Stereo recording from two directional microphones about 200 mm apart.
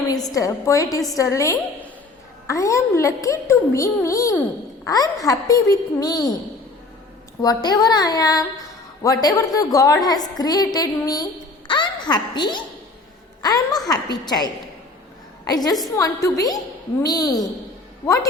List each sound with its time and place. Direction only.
0.1 s a woman's voice: 20° left (ahead or behind)
7.4 s a woman's voice: 20° left (ahead or behind)
11.7 s a sound: 20° left (ahead or behind)
13.4 s a woman's voice: 20° left (ahead or behind)